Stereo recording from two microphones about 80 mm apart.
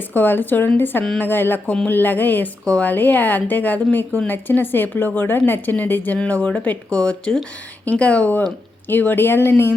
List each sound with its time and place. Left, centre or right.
0.1 s a woman's voice: left